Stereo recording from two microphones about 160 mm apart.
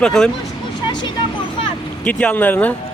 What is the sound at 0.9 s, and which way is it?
Vehicle, 30° left (ahead or behind).